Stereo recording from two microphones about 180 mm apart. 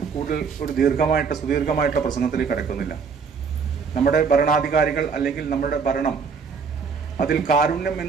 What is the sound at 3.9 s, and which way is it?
A man's voice, 55° left (ahead or behind).